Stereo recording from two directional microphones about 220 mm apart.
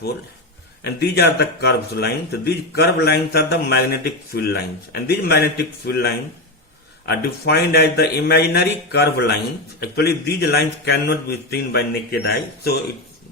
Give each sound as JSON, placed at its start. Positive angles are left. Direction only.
{"t": 0.9, "sound": "speech", "side_deg": 50}